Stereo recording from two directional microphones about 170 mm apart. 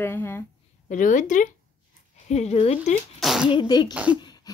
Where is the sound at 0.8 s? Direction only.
50° left (ahead or behind).